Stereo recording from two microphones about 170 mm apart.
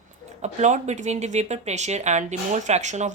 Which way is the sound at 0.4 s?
45° right (ahead or behind).